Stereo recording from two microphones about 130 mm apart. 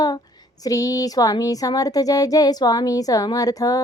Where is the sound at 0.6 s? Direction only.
30° left (ahead or behind).